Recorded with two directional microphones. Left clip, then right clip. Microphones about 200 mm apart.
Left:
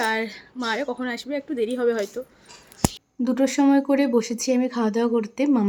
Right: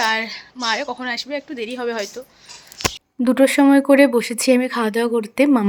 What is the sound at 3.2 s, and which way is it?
Speech, 20° right (ahead or behind).